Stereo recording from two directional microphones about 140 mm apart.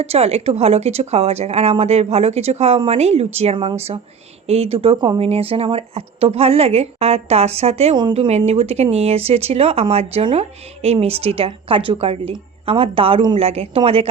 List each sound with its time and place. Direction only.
0.0 s a woman's voice: 50° right (ahead or behind)